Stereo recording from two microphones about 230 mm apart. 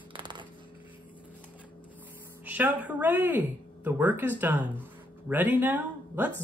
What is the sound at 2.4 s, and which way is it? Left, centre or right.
Speech, centre.